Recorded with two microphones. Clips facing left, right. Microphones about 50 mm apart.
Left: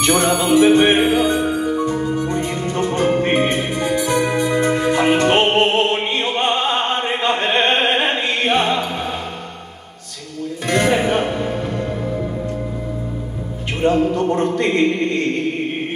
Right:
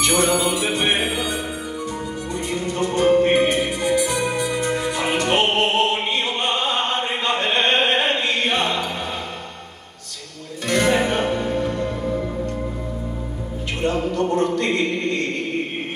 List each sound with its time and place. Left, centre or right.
0.0 s music: left
1.4 s music: left
4.6 s music: centre
4.9 s music: left; by 8.8 s centre
10.7 s music: centre
13.7 s a sound: centre